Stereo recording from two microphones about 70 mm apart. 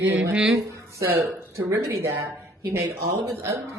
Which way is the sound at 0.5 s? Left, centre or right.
Right.